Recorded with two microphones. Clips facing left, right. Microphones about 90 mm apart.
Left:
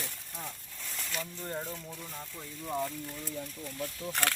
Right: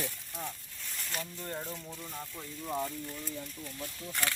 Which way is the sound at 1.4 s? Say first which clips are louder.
Left 3 dB; 15° left (ahead or behind).